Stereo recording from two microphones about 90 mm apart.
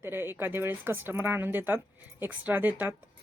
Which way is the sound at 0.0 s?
25° right (ahead or behind).